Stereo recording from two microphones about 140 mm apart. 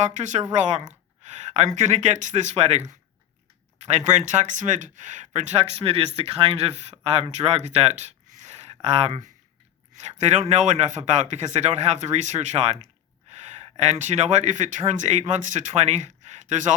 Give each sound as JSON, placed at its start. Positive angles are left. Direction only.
{"t": 0.0, "sound": "speech", "side_deg": -60}
{"t": 3.8, "sound": "speech", "side_deg": -55}